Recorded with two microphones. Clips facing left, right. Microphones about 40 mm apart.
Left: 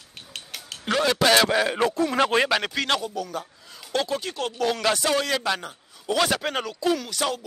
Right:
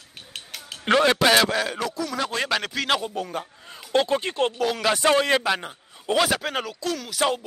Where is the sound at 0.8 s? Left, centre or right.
Right.